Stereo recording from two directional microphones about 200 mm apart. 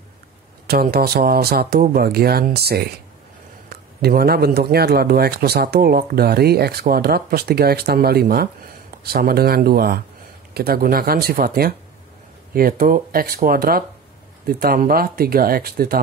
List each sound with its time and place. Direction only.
0.7 s a man's voice: 50° right (ahead or behind)